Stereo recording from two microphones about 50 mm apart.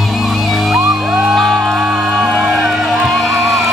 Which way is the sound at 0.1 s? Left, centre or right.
Centre.